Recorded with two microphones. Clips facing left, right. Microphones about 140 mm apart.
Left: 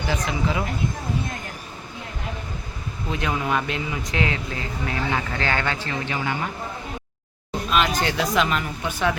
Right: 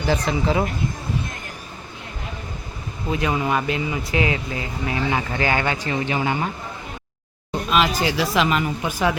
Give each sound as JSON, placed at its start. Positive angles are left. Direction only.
{"t": 0.1, "sound": "speech", "side_deg": -35}
{"t": 3.1, "sound": "speech", "side_deg": -5}
{"t": 7.7, "sound": "speech", "side_deg": -5}